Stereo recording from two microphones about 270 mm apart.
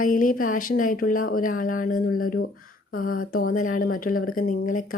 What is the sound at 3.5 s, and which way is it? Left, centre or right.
Speech, left.